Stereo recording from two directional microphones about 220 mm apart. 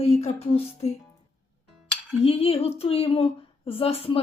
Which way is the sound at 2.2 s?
25° left (ahead or behind).